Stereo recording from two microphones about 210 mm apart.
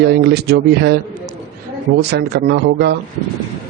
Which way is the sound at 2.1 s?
50° right (ahead or behind).